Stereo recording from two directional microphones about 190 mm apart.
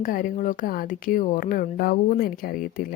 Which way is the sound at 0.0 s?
45° left (ahead or behind).